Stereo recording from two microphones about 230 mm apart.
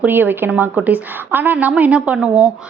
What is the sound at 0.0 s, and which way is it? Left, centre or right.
A woman's voice, centre.